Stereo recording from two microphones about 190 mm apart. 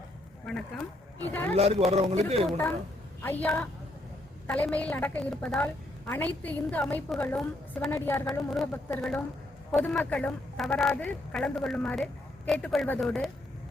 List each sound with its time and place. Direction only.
0.4 s a woman's voice: 5° left (ahead or behind)
1.5 s speech: 30° right (ahead or behind)
3.2 s a woman's voice: 10° left (ahead or behind)